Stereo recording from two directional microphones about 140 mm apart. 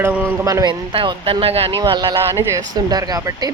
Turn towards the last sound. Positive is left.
turn(degrees=-25)  # may be behind; listen again after turning